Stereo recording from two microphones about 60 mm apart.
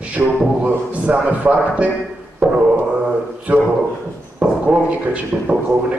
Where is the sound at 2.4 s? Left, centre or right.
Centre.